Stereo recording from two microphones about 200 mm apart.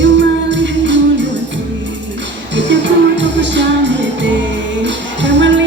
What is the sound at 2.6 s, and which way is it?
Music, 65° right (ahead or behind).